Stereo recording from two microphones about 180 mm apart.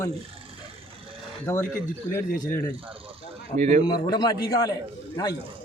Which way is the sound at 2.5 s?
15° left (ahead or behind).